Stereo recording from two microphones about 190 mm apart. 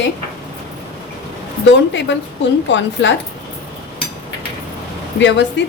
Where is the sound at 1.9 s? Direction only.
75° left (ahead or behind).